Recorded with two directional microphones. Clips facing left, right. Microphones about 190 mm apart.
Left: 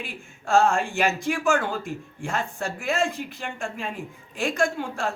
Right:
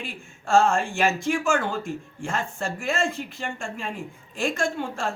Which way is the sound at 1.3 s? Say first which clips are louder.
Even; centre (ahead or behind).